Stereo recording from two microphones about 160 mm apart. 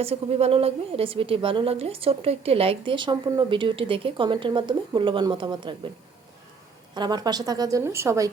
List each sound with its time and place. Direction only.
0.0 s a woman's voice: 40° right (ahead or behind)
6.9 s a woman's voice: 25° right (ahead or behind)